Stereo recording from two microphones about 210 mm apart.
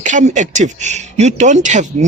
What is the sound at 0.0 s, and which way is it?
Speech, 35° right (ahead or behind).